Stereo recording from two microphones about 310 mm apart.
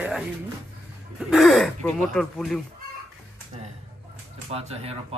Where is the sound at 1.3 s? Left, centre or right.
Centre.